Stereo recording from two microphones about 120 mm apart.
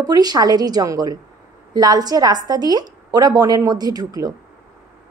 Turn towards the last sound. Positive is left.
turn(degrees=-35)  # may be behind; listen again after turning